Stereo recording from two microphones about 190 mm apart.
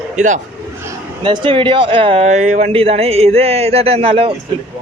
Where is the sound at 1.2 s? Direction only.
25° right (ahead or behind).